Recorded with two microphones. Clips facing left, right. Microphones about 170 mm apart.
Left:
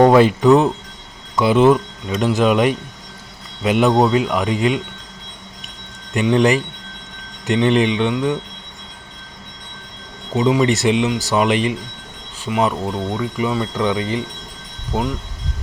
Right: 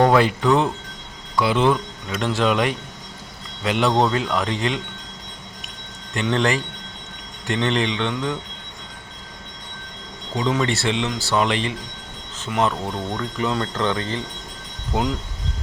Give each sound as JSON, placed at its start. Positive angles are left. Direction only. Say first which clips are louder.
{"t": 0.0, "sound": "speech", "louder": "left 5 dB", "side_deg": 20}
{"t": 6.1, "sound": "speech", "louder": "left 6 dB", "side_deg": 15}
{"t": 10.3, "sound": "speech", "louder": "left 6 dB", "side_deg": 15}